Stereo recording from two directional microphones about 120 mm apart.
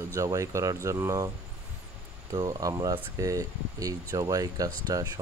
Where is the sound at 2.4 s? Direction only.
30° right (ahead or behind).